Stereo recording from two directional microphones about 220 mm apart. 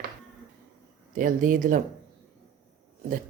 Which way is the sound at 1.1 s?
35° right (ahead or behind).